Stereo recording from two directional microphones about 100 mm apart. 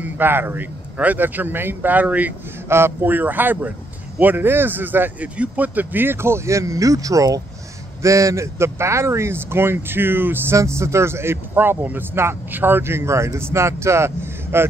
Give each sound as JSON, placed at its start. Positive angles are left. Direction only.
{"t": 0.0, "sound": "speech", "side_deg": -20}